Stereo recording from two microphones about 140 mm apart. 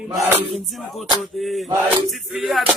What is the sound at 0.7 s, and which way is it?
Speech, centre (ahead or behind).